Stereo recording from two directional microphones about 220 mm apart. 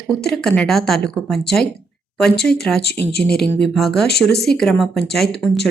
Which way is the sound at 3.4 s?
Centre (ahead or behind).